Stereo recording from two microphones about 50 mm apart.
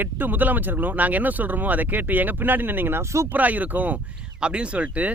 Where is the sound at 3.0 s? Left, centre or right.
Right.